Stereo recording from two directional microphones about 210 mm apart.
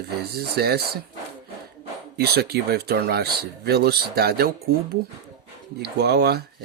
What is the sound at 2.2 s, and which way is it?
Speech, 50° right (ahead or behind).